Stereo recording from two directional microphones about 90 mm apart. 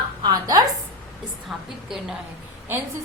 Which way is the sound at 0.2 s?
50° right (ahead or behind).